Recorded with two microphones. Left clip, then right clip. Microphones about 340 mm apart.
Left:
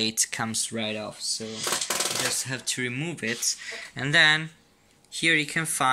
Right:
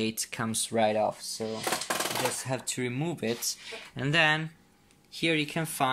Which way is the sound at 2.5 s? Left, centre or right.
Centre.